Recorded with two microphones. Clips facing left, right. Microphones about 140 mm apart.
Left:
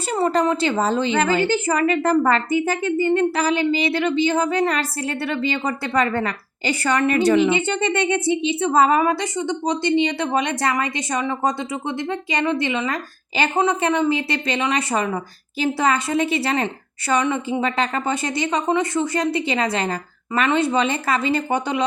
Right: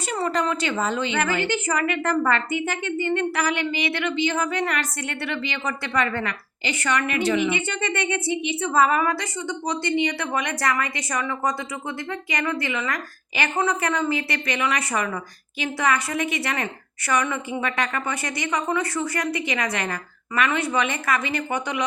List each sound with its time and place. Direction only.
0.1 s a woman's voice: 30° left (ahead or behind)